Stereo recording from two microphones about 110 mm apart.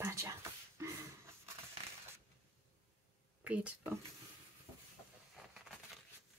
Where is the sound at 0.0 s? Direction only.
25° right (ahead or behind).